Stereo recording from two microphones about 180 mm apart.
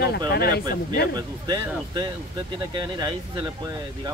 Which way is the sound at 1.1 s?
20° right (ahead or behind).